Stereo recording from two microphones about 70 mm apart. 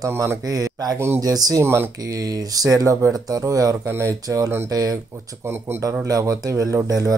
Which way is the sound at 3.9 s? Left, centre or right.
Right.